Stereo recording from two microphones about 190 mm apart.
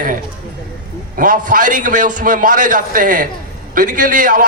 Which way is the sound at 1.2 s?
45° right (ahead or behind).